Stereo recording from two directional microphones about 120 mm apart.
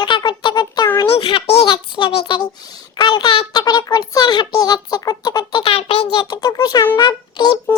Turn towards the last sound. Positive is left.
turn(degrees=35)  # may be behind; listen again after turning